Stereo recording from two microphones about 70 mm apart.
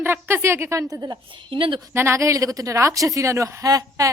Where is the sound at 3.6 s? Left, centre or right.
Right.